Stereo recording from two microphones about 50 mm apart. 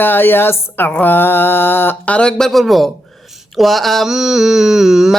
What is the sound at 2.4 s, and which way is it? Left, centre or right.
Mantra, centre.